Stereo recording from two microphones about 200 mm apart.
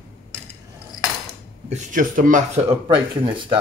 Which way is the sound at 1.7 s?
40° right (ahead or behind).